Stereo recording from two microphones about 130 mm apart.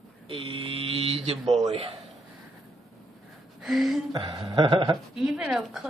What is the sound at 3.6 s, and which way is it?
Speech, centre (ahead or behind).